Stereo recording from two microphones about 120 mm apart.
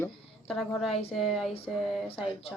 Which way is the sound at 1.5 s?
50° left (ahead or behind).